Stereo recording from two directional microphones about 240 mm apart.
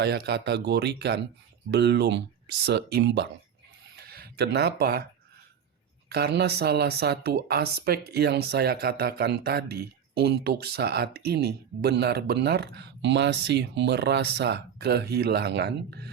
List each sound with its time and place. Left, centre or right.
0.0 s speech: right
3.9 s a sound: right
6.1 s speech: right